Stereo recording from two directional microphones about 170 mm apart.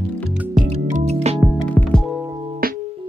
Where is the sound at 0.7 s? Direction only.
45° right (ahead or behind).